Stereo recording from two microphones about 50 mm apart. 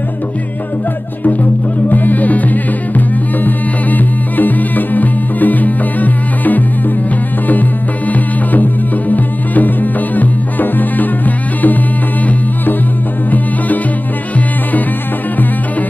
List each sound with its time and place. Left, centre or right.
1.9 s music: left
8.1 s music: left